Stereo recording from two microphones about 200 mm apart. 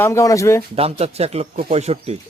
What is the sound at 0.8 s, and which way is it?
Speech, 30° right (ahead or behind).